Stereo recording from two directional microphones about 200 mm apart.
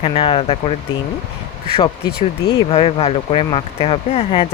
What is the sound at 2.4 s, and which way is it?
Speech, 30° left (ahead or behind).